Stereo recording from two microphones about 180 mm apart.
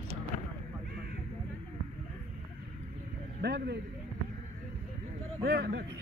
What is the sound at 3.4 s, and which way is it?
Speech, 65° right (ahead or behind).